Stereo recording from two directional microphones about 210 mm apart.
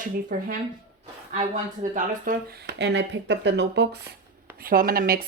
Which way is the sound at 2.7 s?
55° right (ahead or behind).